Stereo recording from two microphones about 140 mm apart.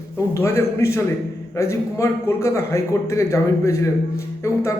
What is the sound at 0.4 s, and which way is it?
A man's voice, 20° left (ahead or behind).